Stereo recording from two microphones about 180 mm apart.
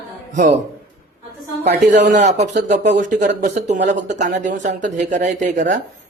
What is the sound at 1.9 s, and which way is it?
Speech, 75° right (ahead or behind).